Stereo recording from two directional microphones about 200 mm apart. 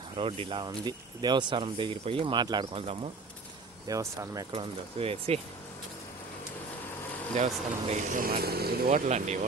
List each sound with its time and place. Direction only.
0.2 s speech: 30° right (ahead or behind)
3.8 s speech: 15° right (ahead or behind)
4.5 s speech: 30° right (ahead or behind)
7.3 s speech: 40° right (ahead or behind)